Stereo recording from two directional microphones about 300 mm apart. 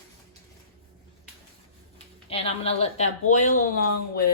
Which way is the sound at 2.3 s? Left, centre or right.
Centre.